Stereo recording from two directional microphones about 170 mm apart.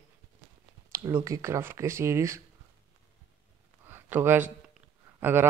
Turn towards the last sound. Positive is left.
turn(degrees=-10)  # may be behind; listen again after turning